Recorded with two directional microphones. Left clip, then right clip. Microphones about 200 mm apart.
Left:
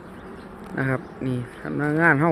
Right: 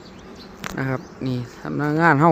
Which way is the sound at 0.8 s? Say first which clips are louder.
Left 2 dB; 5° right (ahead or behind).